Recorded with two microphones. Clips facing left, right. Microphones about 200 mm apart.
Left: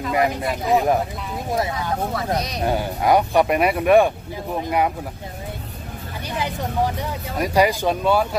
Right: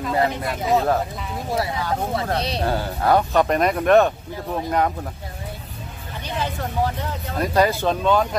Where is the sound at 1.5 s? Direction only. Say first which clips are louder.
Even; 20° left (ahead or behind).